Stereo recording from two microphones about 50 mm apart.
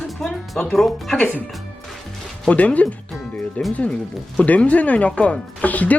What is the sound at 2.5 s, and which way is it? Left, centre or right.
Speech, left.